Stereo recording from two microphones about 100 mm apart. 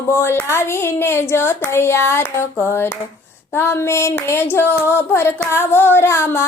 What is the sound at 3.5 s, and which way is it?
Female singing, 25° left (ahead or behind).